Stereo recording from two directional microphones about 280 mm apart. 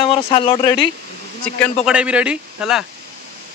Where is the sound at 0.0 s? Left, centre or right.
Centre.